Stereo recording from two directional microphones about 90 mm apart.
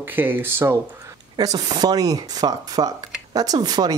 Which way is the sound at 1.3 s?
45° right (ahead or behind).